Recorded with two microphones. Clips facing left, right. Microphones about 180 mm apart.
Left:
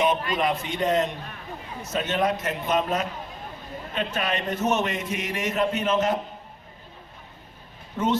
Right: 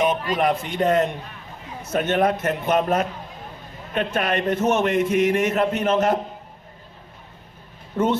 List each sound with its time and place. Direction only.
0.4 s a man's voice: 55° right (ahead or behind)
7.9 s a man's voice: 55° right (ahead or behind)